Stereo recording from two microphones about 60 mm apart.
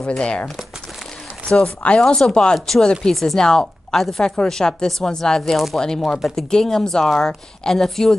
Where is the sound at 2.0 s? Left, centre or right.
Centre.